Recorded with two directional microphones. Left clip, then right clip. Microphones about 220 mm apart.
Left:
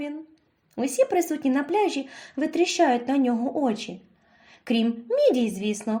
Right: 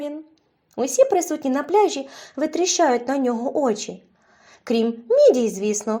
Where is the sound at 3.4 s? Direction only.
15° right (ahead or behind).